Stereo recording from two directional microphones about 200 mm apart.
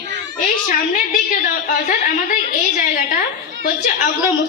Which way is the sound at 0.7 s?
40° left (ahead or behind).